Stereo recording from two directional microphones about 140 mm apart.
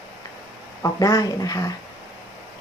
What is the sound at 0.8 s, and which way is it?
Speech, 25° left (ahead or behind).